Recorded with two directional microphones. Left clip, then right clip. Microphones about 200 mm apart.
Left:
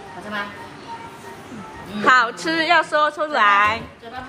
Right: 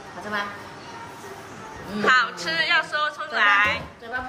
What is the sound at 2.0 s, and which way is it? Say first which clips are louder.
A woman's voice: left 4 dB; 25° left (ahead or behind).